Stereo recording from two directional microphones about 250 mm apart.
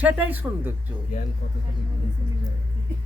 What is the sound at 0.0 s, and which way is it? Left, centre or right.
Speech, centre.